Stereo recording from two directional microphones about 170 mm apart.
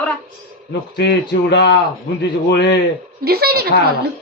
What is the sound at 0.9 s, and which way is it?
A man's voice, 90° left.